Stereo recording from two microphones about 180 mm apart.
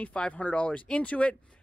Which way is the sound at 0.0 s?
5° left (ahead or behind).